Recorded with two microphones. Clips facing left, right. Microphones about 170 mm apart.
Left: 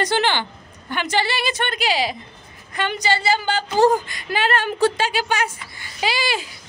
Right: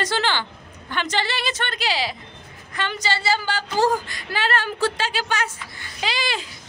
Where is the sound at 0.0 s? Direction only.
15° left (ahead or behind).